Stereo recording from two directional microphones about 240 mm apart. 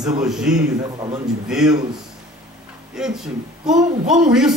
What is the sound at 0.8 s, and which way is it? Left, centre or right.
Speech, centre.